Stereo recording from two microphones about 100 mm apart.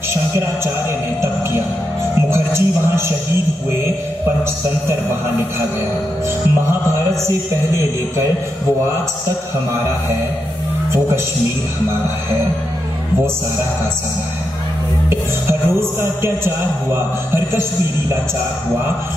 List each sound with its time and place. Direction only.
2.2 s music: 25° right (ahead or behind)
16.0 s a man's voice: 25° right (ahead or behind)